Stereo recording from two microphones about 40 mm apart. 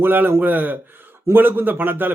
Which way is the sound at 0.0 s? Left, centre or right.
Right.